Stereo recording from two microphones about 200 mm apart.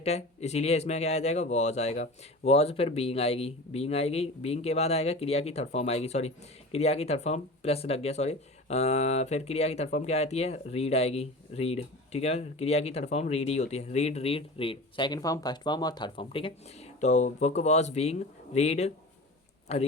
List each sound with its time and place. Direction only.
0.0 s speech: 30° left (ahead or behind)